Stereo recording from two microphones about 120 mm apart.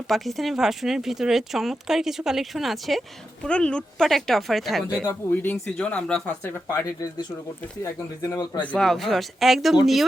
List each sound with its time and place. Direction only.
0.1 s speech: centre (ahead or behind)
5.0 s speech: 15° left (ahead or behind)
8.2 s a man's voice: 25° left (ahead or behind)
8.6 s speech: 5° left (ahead or behind)